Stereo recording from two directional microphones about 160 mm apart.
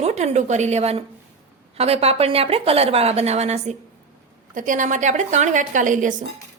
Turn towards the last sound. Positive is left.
turn(degrees=-55)  # may be behind; listen again after turning